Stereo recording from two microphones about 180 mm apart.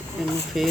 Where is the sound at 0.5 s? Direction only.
Centre (ahead or behind).